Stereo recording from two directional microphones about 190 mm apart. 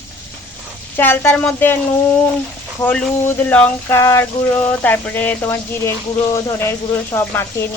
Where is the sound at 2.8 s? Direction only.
5° left (ahead or behind).